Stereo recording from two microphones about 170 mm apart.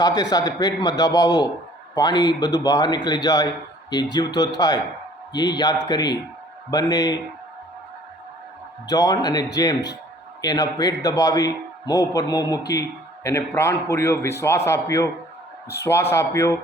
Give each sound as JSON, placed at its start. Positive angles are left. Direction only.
{"t": 0.0, "sound": "a man's voice", "side_deg": 25}
{"t": 8.9, "sound": "a man's voice", "side_deg": 20}